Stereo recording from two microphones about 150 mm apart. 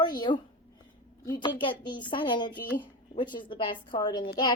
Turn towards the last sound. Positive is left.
turn(degrees=30)  # may be behind; listen again after turning